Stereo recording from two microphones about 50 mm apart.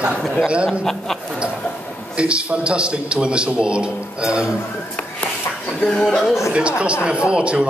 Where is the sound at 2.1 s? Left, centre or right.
Right.